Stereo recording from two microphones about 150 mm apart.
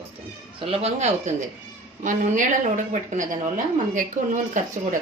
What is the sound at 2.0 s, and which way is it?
Speech, 60° right (ahead or behind).